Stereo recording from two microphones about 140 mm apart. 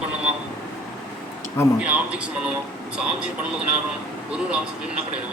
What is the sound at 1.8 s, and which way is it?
Speech, 10° right (ahead or behind).